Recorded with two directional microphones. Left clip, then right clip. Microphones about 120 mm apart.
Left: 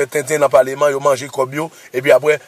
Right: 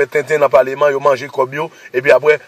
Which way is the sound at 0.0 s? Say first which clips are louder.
Right 2 dB; 20° left (ahead or behind).